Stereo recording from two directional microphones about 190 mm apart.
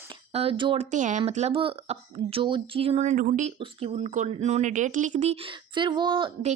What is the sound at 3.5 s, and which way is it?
A woman's voice, 30° right (ahead or behind).